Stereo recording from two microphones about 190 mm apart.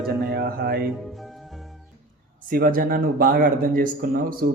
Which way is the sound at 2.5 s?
50° right (ahead or behind).